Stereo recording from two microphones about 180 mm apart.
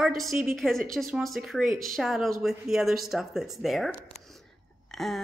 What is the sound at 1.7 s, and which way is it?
Speech, 50° right (ahead or behind).